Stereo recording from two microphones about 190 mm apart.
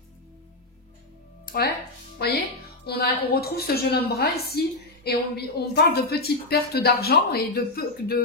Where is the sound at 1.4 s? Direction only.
50° left (ahead or behind).